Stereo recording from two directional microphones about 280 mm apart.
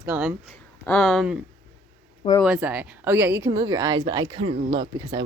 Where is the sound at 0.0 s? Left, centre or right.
Centre.